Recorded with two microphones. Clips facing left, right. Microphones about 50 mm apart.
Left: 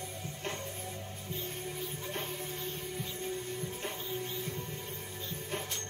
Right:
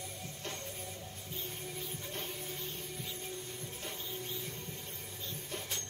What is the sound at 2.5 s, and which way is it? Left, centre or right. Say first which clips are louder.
Music: left 4 dB; centre.